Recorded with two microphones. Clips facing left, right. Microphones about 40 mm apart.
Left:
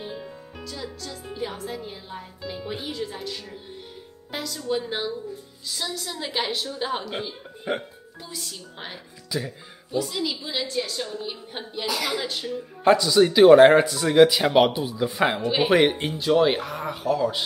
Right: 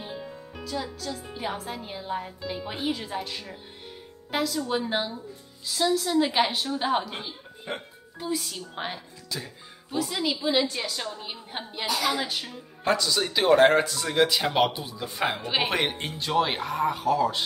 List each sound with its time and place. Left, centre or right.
0.0 s music: centre
0.7 s speech: centre
1.6 s a woman's voice: centre
7.7 s speech: centre
8.7 s a woman's voice: centre
12.2 s speech: centre
12.8 s speech: centre
15.4 s speech: centre